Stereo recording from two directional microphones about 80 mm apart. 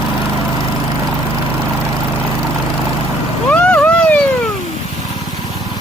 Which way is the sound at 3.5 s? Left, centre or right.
Centre.